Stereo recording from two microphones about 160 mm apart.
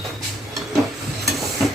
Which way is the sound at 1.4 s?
Centre (ahead or behind).